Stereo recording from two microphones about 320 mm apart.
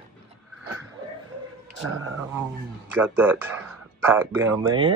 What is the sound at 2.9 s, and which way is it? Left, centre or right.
Speech, centre.